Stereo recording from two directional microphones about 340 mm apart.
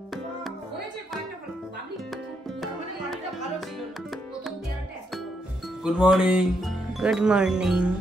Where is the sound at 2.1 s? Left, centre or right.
Centre.